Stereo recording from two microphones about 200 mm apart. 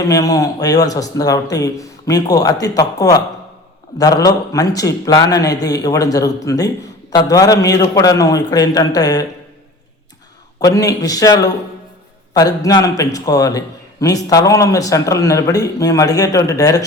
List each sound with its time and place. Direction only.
0.0 s a man's voice: 15° left (ahead or behind)
10.6 s a man's voice: 15° left (ahead or behind)